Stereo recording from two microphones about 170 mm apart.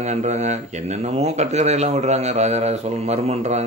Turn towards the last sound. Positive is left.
turn(degrees=-40)  # may be behind; listen again after turning